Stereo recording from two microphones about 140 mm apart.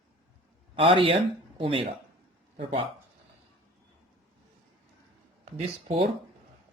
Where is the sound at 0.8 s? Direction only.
40° right (ahead or behind).